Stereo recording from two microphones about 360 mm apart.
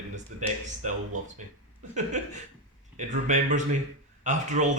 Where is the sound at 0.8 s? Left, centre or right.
Right.